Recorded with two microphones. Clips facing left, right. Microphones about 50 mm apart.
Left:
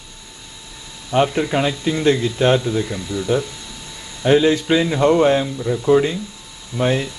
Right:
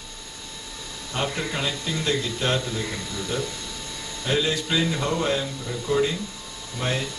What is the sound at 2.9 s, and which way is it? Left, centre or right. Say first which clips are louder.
Speech: left 9 dB; centre.